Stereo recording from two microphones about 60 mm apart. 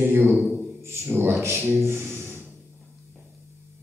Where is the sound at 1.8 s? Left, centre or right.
Right.